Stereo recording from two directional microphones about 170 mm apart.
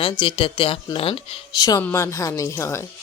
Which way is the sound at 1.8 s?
10° left (ahead or behind).